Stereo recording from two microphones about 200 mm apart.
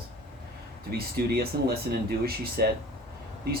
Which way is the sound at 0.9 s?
50° right (ahead or behind).